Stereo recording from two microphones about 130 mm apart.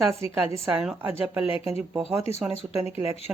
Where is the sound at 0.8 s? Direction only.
5° right (ahead or behind).